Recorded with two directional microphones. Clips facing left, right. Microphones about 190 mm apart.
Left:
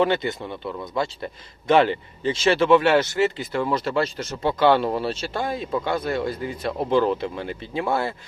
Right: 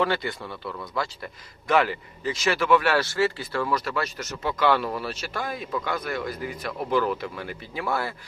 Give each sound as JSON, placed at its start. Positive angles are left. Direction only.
{"t": 0.0, "sound": "a man's voice", "side_deg": 20}